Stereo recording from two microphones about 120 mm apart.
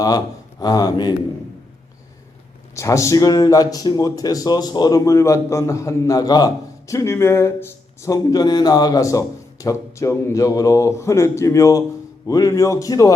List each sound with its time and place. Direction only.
0.6 s speech: 35° left (ahead or behind)
2.7 s speech: 25° left (ahead or behind)